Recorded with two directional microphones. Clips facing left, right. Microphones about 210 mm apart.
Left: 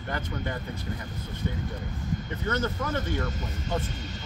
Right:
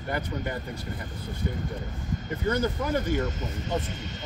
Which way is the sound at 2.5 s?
10° right (ahead or behind).